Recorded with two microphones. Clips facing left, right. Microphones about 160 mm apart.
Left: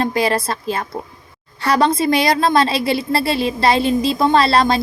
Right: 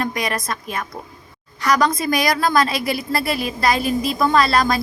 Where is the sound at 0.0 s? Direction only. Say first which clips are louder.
Left 6 dB; 30° left (ahead or behind).